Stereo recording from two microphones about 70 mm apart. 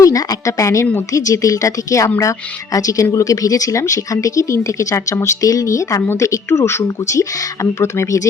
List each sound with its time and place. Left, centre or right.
0.0 s speech: left
2.7 s speech: left